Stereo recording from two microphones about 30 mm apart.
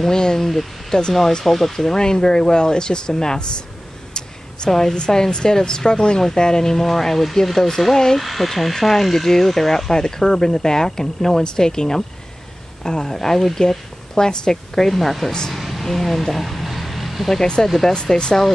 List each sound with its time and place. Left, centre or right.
0.1 s a sound: left
0.4 s speech: centre
2.0 s speech: left
4.6 s speech: centre
4.9 s speech: left
8.2 s speech: centre
14.1 s speech: left
14.8 s speech: centre
15.5 s a sound: centre
17.6 s speech: centre